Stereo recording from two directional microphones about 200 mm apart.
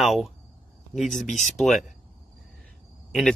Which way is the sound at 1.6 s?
Centre (ahead or behind).